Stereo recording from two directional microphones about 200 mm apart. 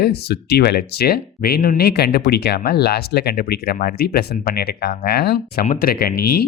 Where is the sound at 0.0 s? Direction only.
55° left (ahead or behind).